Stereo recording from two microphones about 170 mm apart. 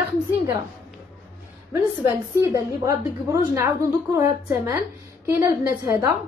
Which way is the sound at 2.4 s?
20° right (ahead or behind).